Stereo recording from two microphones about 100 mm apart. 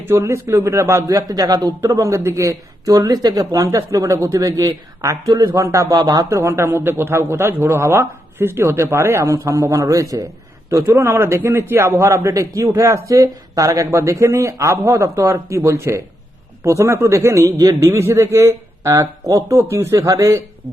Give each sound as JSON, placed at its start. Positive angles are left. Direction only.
{"t": 0.1, "sound": "a man's voice", "side_deg": -25}
{"t": 17.8, "sound": "a man's voice", "side_deg": -25}